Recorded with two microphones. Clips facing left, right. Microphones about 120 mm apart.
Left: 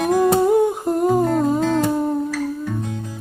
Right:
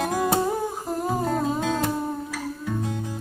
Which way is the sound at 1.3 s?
10° right (ahead or behind).